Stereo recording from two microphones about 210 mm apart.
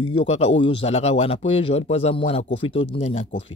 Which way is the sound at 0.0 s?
25° left (ahead or behind).